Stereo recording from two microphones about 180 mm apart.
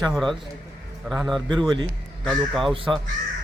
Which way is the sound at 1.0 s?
Centre (ahead or behind).